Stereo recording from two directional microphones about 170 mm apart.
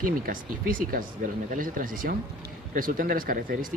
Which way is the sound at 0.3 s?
55° right (ahead or behind).